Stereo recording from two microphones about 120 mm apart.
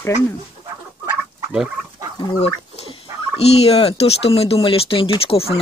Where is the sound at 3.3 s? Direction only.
60° left (ahead or behind).